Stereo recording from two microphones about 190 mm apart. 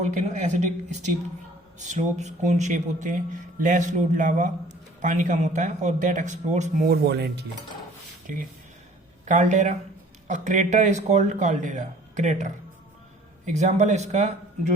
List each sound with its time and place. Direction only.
0.0 s speech: 40° right (ahead or behind)
6.8 s speech: 55° right (ahead or behind)
9.2 s speech: 40° right (ahead or behind)